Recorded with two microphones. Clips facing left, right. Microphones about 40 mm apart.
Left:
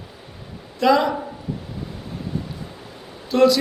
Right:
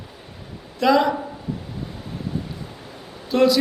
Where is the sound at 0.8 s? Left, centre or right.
Centre.